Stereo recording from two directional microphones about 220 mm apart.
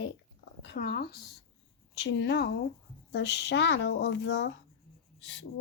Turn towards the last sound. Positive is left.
turn(degrees=55)  # may be behind; listen again after turning